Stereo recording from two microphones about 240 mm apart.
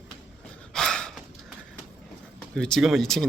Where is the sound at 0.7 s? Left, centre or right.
Centre.